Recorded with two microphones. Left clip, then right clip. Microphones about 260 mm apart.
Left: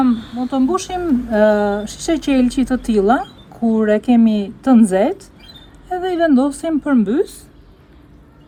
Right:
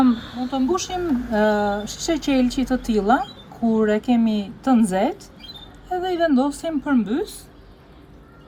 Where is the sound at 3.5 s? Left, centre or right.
Left.